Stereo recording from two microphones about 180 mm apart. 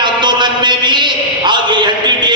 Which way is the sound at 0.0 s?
25° right (ahead or behind).